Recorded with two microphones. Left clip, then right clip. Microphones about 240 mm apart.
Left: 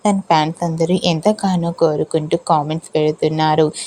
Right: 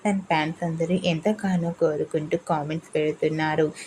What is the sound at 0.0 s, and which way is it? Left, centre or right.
A woman's voice, left.